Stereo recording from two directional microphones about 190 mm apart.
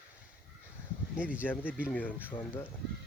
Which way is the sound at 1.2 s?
5° right (ahead or behind).